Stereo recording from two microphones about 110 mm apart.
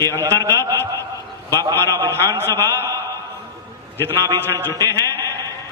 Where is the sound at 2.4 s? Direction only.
20° left (ahead or behind).